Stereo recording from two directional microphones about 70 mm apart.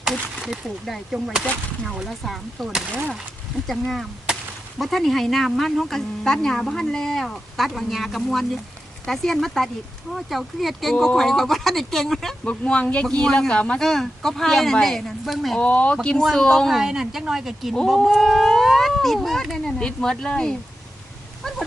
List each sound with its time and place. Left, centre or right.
0.0 s a woman's voice: centre
12.5 s speech: centre
13.8 s a woman's voice: centre
15.5 s speech: left
16.0 s a woman's voice: centre
16.7 s a woman's voice: centre